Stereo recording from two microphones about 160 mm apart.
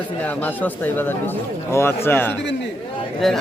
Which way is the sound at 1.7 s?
15° left (ahead or behind).